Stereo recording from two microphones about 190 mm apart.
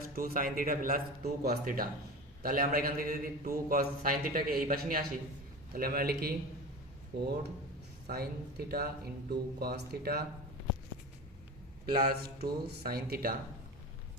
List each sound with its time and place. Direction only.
0.0 s a man's voice: 45° right (ahead or behind)
12.0 s a man's voice: 55° right (ahead or behind)